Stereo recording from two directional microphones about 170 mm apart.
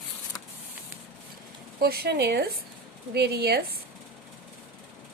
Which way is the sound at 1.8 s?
65° right (ahead or behind).